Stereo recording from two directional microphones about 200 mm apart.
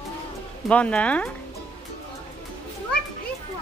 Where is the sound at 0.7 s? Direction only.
5° left (ahead or behind).